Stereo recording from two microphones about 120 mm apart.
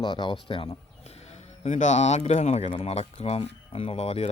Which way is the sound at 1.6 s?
75° left (ahead or behind).